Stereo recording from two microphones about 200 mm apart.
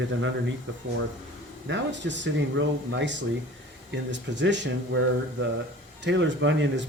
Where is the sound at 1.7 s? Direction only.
65° right (ahead or behind).